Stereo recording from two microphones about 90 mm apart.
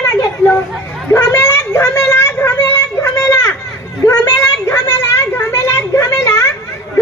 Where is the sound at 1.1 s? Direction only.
25° left (ahead or behind).